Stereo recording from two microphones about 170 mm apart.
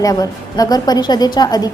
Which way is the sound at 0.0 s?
20° left (ahead or behind).